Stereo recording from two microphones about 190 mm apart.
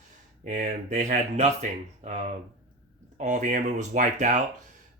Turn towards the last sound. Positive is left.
turn(degrees=-40)  # may be behind; listen again after turning